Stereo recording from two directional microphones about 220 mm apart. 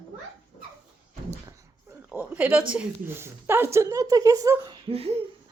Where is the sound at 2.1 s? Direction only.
5° right (ahead or behind).